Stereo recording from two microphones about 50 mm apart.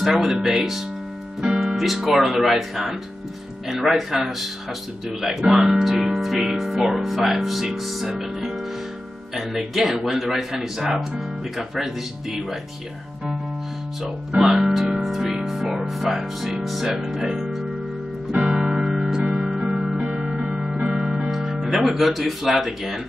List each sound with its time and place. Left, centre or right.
0.0 s speech: centre
8.1 s music: centre
9.3 s speech: centre
14.0 s speech: centre
15.0 s music: centre
17.0 s speech: centre
18.3 s music: centre
21.3 s music: centre
21.8 s speech: centre